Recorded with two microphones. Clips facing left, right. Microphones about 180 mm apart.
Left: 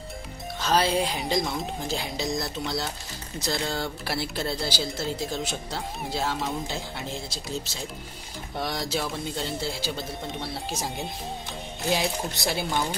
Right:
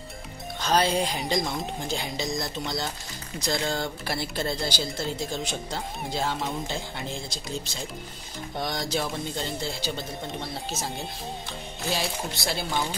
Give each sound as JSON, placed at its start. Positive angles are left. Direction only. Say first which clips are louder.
{"t": 0.6, "sound": "speech", "louder": "even", "side_deg": 5}
{"t": 11.9, "sound": "speech", "louder": "left 3 dB", "side_deg": 15}